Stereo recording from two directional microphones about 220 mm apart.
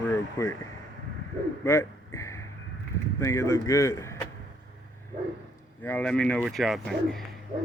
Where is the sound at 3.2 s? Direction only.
15° left (ahead or behind).